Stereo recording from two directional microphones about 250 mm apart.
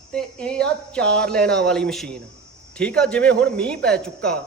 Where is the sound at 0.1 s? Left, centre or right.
Centre.